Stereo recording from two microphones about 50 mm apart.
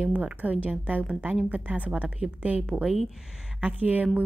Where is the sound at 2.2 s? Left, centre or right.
Centre.